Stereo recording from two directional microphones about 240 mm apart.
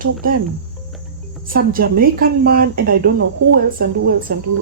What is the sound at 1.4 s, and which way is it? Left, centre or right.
Speech, right.